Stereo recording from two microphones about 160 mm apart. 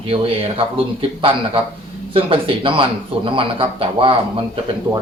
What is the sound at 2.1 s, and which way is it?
Speech, 35° right (ahead or behind).